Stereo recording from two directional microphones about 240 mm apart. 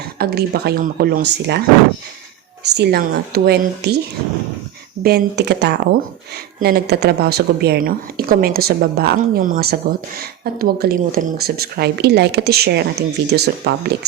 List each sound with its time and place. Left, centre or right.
0.2 s speech: right
2.7 s speech: right
5.0 s speech: right